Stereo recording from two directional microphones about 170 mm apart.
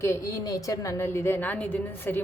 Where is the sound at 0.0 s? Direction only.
20° left (ahead or behind).